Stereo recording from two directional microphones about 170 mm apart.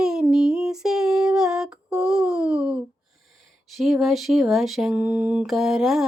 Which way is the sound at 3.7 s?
Centre (ahead or behind).